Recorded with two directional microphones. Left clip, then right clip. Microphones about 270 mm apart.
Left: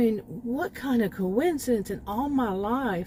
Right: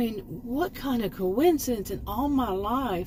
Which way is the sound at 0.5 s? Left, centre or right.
Left.